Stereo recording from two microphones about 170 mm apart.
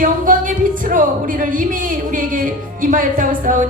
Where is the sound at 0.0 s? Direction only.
50° right (ahead or behind).